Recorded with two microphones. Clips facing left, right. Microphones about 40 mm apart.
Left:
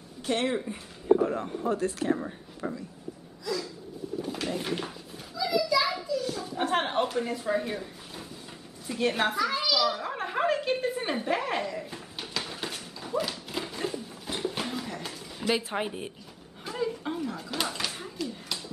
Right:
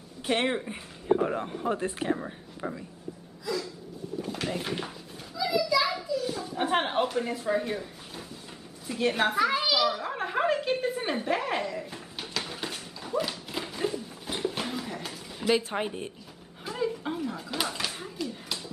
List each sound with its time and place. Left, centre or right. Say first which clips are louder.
0.2 s speech: right 1 dB; right
2.1 s speech: left 1 dB; centre
3.4 s a sound: even; centre
4.3 s children playing: even; centre
8.8 s a woman's voice: right 1 dB; centre
9.4 s a child's voice: right 3 dB; centre
9.8 s a sound: right 1 dB; centre